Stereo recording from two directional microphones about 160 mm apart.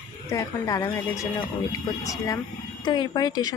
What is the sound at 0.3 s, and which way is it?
Speech, 20° left (ahead or behind).